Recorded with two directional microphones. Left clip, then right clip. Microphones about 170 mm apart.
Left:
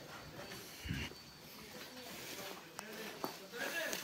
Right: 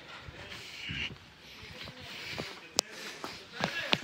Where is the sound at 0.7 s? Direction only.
30° left (ahead or behind).